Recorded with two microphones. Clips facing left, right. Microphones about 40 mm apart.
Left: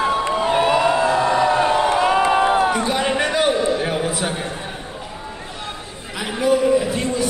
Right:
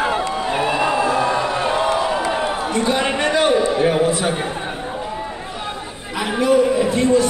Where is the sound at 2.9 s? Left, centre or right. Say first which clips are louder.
Right 1 dB; centre.